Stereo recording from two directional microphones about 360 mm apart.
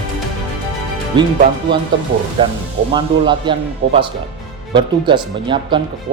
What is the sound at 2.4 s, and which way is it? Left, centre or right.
Speech, centre.